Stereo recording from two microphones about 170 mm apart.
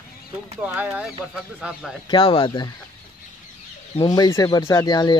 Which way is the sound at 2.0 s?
30° left (ahead or behind).